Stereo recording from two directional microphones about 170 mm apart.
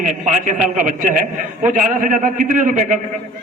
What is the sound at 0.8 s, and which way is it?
A man's voice, 50° right (ahead or behind).